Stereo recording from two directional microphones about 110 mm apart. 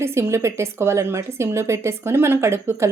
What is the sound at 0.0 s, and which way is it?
A woman's voice, 25° right (ahead or behind).